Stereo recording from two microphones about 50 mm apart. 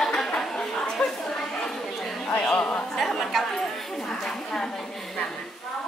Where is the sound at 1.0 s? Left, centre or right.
Left.